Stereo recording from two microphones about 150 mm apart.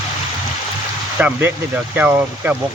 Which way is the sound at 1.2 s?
15° right (ahead or behind).